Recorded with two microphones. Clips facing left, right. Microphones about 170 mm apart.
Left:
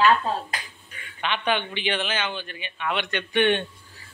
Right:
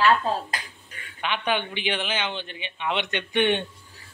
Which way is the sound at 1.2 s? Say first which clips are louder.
Left 1 dB; 10° right (ahead or behind).